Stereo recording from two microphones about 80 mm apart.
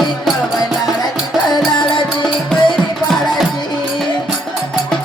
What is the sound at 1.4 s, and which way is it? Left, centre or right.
Music, left.